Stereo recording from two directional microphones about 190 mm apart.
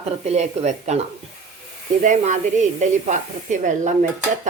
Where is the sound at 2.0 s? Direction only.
40° right (ahead or behind).